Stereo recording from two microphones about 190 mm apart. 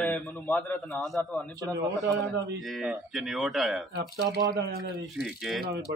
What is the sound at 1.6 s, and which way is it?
Speech, 15° right (ahead or behind).